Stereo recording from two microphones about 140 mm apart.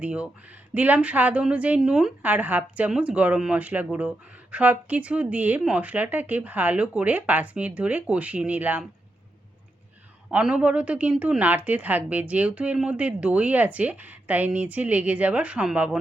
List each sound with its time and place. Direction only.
0.0 s a woman's voice: 10° right (ahead or behind)
10.3 s a woman's voice: 10° right (ahead or behind)